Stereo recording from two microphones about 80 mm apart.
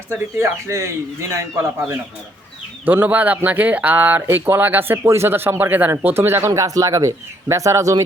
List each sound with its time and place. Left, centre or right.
0.1 s speech: right
2.8 s speech: right
6.5 s speech: right